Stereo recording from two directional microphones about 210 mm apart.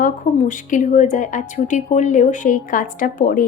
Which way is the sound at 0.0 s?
40° left (ahead or behind).